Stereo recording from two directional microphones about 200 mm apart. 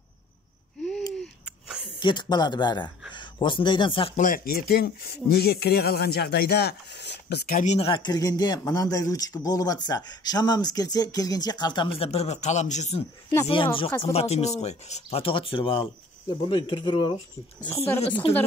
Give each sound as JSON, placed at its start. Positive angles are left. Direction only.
{"t": 0.8, "sound": "a sound", "side_deg": 5}
{"t": 2.0, "sound": "speech", "side_deg": 25}
{"t": 4.2, "sound": "speech", "side_deg": 45}
{"t": 7.6, "sound": "a man's voice", "side_deg": 30}
{"t": 14.1, "sound": "speech", "side_deg": 30}